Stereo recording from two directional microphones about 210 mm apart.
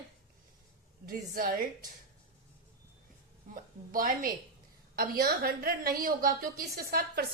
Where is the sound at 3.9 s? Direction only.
40° right (ahead or behind).